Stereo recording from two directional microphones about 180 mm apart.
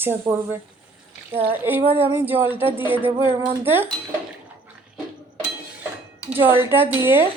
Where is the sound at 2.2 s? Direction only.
10° right (ahead or behind).